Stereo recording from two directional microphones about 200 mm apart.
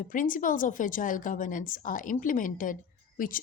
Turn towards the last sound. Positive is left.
turn(degrees=45)  # may be behind; listen again after turning